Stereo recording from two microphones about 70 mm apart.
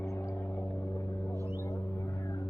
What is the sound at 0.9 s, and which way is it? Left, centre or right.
Music, left.